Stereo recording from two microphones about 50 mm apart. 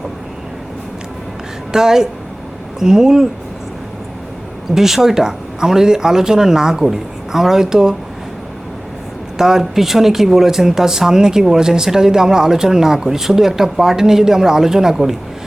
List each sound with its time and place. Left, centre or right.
1.7 s speech: centre
4.7 s speech: centre
9.4 s speech: centre